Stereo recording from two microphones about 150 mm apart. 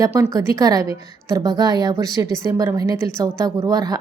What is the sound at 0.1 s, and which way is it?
A woman's voice, 20° right (ahead or behind).